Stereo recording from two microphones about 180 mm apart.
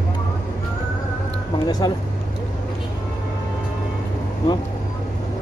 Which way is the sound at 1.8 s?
20° left (ahead or behind).